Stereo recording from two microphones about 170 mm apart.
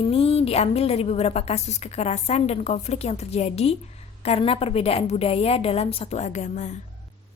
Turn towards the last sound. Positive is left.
turn(degrees=45)  # may be behind; listen again after turning